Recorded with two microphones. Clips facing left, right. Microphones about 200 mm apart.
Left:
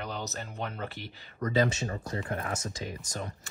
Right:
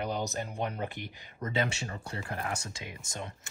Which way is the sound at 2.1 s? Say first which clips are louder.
Even; 25° right (ahead or behind).